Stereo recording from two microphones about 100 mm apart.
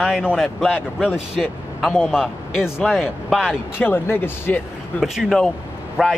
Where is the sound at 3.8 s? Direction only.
20° left (ahead or behind).